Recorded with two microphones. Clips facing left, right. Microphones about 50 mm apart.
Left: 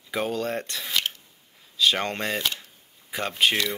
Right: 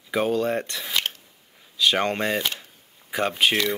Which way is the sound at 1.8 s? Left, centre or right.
Centre.